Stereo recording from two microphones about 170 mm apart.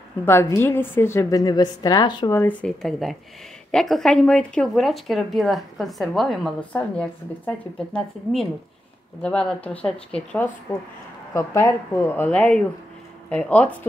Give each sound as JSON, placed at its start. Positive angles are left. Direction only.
{"t": 0.2, "sound": "a woman's voice", "side_deg": 15}
{"t": 2.3, "sound": "speech", "side_deg": 10}